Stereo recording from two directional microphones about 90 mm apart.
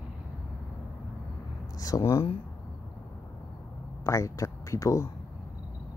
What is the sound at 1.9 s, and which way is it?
Speech, 35° left (ahead or behind).